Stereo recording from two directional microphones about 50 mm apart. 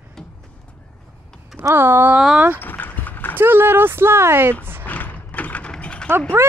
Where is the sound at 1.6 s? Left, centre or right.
Right.